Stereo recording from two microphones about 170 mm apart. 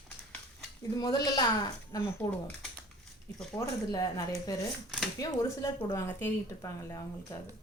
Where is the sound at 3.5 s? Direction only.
20° left (ahead or behind).